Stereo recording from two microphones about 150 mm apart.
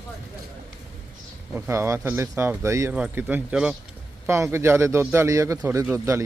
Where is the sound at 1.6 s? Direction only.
15° right (ahead or behind).